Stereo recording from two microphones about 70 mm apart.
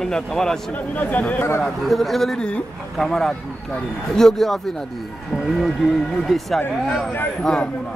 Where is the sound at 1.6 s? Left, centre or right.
Centre.